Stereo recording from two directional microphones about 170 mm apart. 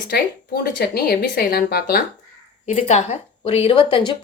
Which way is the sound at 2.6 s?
40° left (ahead or behind).